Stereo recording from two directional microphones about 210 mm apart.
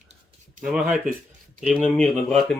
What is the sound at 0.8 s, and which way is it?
Speech, 40° right (ahead or behind).